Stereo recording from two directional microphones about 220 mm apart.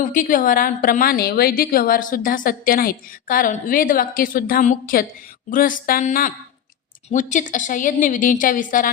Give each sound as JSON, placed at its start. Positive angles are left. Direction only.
{"t": 0.0, "sound": "a woman's voice", "side_deg": 35}